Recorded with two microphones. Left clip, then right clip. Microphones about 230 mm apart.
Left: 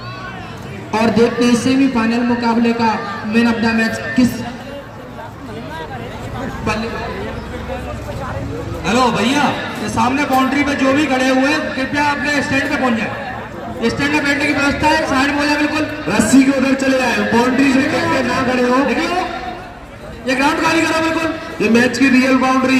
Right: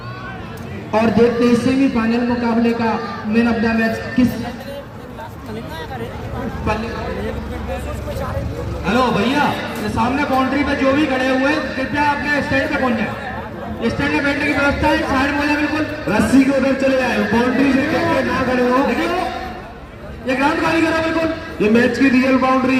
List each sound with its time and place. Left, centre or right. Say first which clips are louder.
0.9 s a man's voice: even; left
6.7 s a man's voice: left 1 dB; left
8.8 s a man's voice: left 2 dB; left
20.2 s a man's voice: left 2 dB; left